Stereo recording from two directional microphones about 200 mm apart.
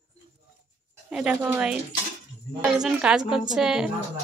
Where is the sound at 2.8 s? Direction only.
5° right (ahead or behind).